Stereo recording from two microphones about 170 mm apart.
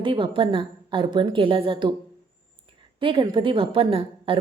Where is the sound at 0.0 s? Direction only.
30° right (ahead or behind).